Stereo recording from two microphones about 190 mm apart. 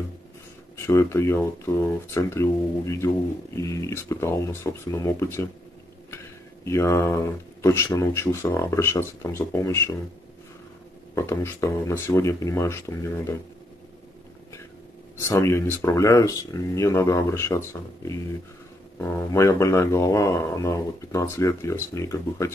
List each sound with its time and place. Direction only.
0.7 s speech: 15° left (ahead or behind)
6.6 s speech: 15° left (ahead or behind)
11.1 s speech: 15° left (ahead or behind)
15.1 s speech: 15° left (ahead or behind)